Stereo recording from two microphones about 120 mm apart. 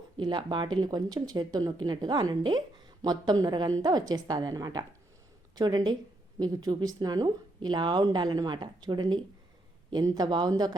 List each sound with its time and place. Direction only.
0.2 s speech: 40° right (ahead or behind)